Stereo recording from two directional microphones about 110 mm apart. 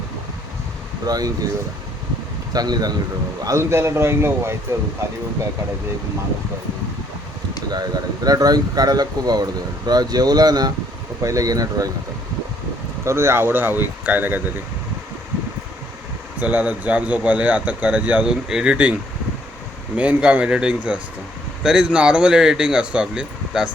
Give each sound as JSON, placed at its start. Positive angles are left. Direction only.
{"t": 1.0, "sound": "speech", "side_deg": -35}
{"t": 2.5, "sound": "speech", "side_deg": -35}
{"t": 3.4, "sound": "a man's voice", "side_deg": -25}
{"t": 7.7, "sound": "speech", "side_deg": -35}
{"t": 13.1, "sound": "speech", "side_deg": -25}
{"t": 16.4, "sound": "speech", "side_deg": -15}
{"t": 20.0, "sound": "speech", "side_deg": -15}